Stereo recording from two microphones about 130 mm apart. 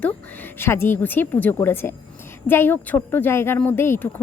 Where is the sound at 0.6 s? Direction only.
15° left (ahead or behind).